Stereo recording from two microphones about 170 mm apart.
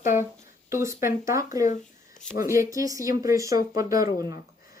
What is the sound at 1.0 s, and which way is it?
Speech, 15° right (ahead or behind).